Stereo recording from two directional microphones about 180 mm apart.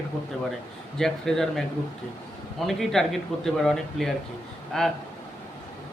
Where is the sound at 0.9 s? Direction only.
Centre (ahead or behind).